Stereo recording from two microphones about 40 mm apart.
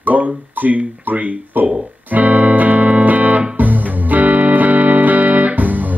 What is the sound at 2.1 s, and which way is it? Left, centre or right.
Music, right.